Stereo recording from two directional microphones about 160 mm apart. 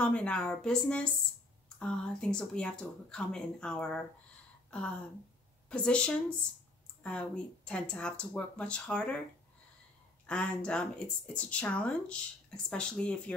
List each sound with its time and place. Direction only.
0.0 s speech: 5° left (ahead or behind)
4.6 s a sound: 5° left (ahead or behind)
5.7 s speech: 5° left (ahead or behind)
10.2 s speech: 5° left (ahead or behind)